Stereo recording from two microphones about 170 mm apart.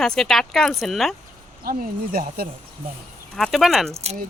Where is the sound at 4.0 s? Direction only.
40° right (ahead or behind).